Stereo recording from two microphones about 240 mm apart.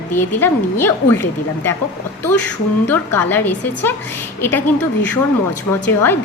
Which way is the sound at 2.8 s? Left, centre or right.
Centre.